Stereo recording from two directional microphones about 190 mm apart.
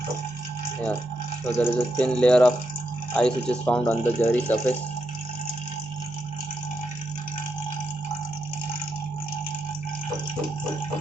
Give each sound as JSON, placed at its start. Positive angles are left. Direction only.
{"t": 1.5, "sound": "speech", "side_deg": 5}